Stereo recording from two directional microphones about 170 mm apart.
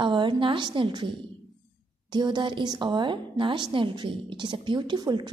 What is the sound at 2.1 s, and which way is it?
A woman's voice, 25° right (ahead or behind).